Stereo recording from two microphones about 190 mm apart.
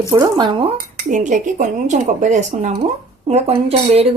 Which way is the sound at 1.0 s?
40° right (ahead or behind).